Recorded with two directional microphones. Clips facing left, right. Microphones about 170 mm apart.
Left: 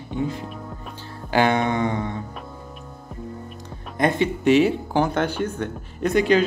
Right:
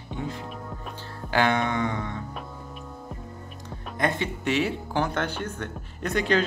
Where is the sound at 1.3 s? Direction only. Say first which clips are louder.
Left 4 dB; 15° left (ahead or behind).